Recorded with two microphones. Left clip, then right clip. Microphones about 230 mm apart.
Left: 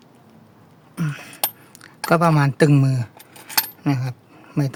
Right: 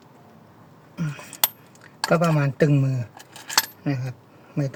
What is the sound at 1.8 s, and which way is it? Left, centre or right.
Speech, left.